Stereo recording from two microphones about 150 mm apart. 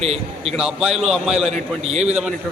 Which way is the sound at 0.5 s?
5° right (ahead or behind).